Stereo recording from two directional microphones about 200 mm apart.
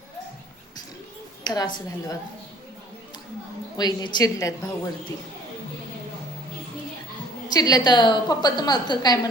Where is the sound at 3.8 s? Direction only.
20° left (ahead or behind).